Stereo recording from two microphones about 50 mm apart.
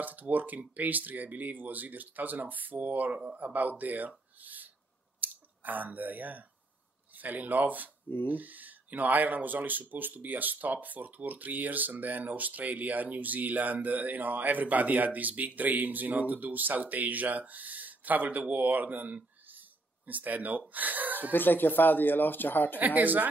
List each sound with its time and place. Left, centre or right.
0.0 s speech: right
4.4 s a sound: right
5.2 s speech: right
21.3 s speech: left
22.8 s speech: right